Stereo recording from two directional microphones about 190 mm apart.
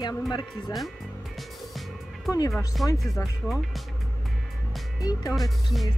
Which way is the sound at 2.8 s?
Centre (ahead or behind).